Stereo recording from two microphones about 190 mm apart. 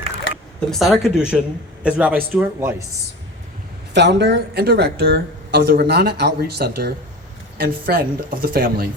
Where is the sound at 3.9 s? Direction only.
65° right (ahead or behind).